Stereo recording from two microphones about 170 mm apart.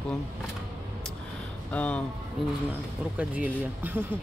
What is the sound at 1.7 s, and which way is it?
Speech, 10° left (ahead or behind).